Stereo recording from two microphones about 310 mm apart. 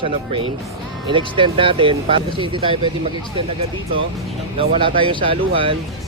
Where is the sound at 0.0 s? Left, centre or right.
Centre.